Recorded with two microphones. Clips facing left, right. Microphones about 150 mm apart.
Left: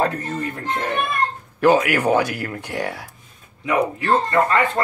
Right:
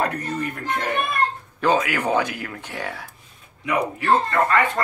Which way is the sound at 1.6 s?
10° left (ahead or behind).